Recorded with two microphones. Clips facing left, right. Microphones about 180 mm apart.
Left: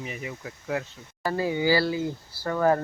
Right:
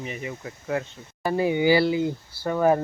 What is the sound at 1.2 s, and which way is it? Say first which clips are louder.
Speech: right 4 dB; 20° right (ahead or behind).